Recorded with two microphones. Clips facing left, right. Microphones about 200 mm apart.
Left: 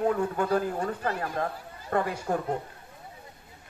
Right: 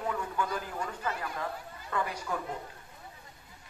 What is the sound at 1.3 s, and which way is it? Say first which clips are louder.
A man's voice: left 6 dB; 50° left (ahead or behind).